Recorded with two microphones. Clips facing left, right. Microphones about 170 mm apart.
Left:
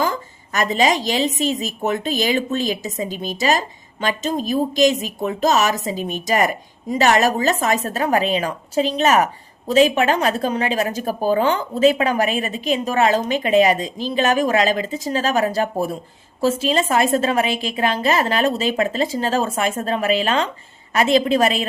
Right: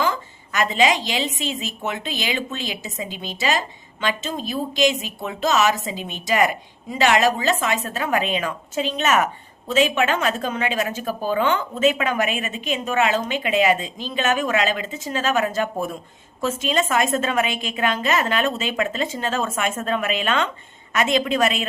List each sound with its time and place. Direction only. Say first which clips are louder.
0.0 s a woman's voice: left 1 dB; 40° left (ahead or behind)